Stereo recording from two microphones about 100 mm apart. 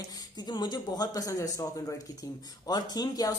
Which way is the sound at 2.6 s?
40° left (ahead or behind).